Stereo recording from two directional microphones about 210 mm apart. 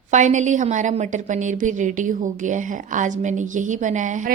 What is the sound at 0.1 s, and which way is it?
A woman's voice, 35° right (ahead or behind).